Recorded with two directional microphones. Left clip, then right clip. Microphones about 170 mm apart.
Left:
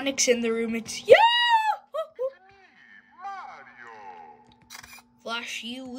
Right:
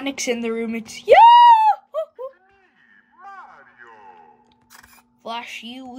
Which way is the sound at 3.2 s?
35° left (ahead or behind).